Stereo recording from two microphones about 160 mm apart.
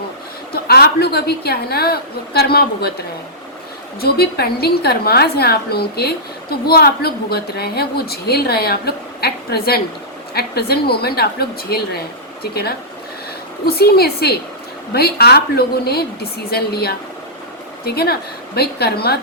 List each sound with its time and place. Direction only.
0.5 s a woman's voice: 75° left (ahead or behind)
4.0 s a woman's voice: 75° left (ahead or behind)